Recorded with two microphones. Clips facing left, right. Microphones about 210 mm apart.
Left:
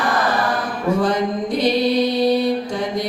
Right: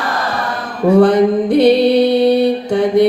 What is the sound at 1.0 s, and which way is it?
Mantra, 65° right (ahead or behind).